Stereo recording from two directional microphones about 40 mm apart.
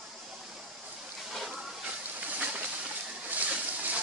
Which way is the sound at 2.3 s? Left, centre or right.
Right.